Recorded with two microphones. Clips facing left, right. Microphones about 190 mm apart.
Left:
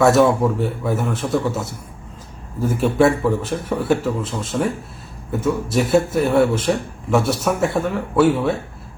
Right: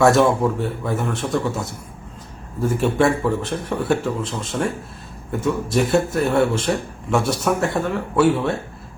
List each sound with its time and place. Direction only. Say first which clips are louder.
0.0 s a man's voice: left 1 dB; centre (ahead or behind)
5.7 s a man's voice: left 2 dB; 5° left (ahead or behind)